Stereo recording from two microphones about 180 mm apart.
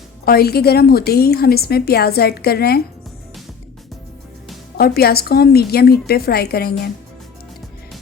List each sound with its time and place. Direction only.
0.3 s a woman's voice: 60° left (ahead or behind)
4.8 s a woman's voice: 60° left (ahead or behind)